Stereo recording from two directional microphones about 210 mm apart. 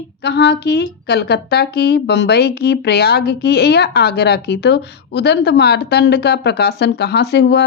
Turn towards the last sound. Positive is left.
turn(degrees=50)  # may be behind; listen again after turning